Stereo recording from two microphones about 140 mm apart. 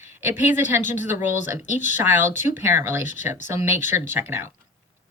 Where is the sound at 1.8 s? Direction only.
15° right (ahead or behind).